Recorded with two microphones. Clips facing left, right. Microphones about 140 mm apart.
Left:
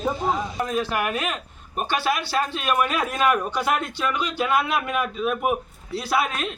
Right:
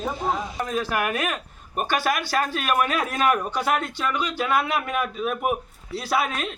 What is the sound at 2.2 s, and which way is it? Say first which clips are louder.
A man's voice: even; 10° right (ahead or behind).